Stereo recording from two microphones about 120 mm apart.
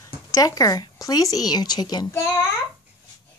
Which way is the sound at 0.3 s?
30° left (ahead or behind).